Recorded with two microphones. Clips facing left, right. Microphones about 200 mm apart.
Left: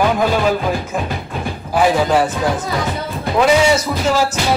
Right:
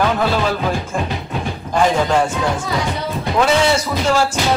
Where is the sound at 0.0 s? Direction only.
10° left (ahead or behind).